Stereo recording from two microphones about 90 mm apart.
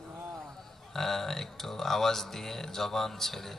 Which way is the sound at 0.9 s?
5° left (ahead or behind).